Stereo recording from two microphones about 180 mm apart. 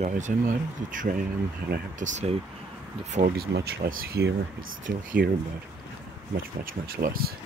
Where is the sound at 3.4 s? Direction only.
60° right (ahead or behind).